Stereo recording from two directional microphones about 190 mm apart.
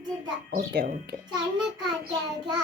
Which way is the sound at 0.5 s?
55° right (ahead or behind).